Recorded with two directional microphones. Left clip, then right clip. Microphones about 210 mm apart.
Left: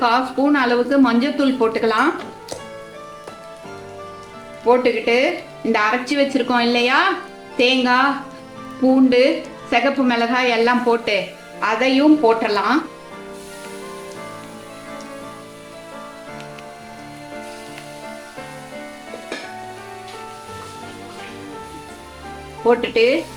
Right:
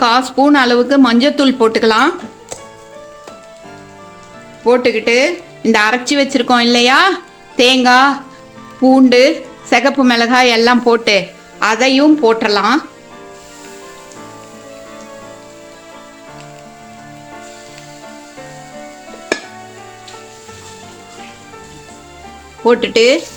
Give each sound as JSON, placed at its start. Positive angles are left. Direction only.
{"t": 0.0, "sound": "speech", "side_deg": -55}
{"t": 4.6, "sound": "speech", "side_deg": -55}
{"t": 22.6, "sound": "speech", "side_deg": -55}